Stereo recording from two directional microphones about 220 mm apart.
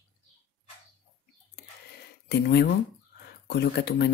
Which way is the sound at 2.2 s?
50° left (ahead or behind).